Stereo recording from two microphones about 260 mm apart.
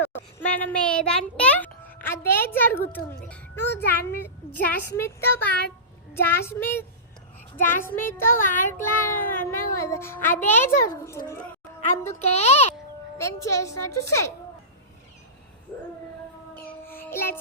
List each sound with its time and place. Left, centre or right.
0.1 s a child's voice: centre
12.0 s a woman's voice: left
13.1 s a child's voice: centre
16.6 s child singing: centre